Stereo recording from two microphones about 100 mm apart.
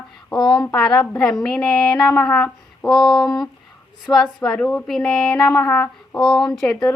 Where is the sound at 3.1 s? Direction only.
45° left (ahead or behind).